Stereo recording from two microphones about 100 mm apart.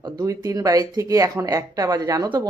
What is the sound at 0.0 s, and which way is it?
Speech, 35° right (ahead or behind).